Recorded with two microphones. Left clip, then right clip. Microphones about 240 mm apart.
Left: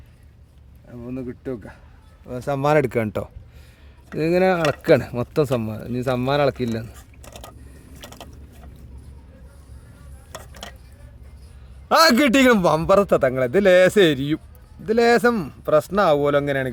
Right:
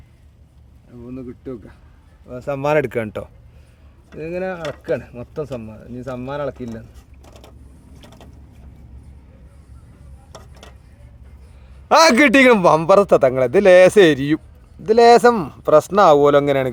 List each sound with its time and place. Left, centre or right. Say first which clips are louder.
1.1 s speech: left 2 dB; left
2.2 s speech: even; left
4.1 s speech: left 7 dB; left
8.0 s vehicle: left 5 dB; left
11.9 s a man's voice: right 4 dB; centre